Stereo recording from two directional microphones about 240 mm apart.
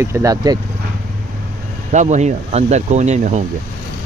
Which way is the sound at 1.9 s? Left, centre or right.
Right.